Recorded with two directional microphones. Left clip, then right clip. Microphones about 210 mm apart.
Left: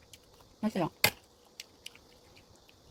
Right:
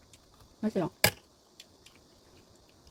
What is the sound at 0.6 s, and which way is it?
Speech, 25° left (ahead or behind).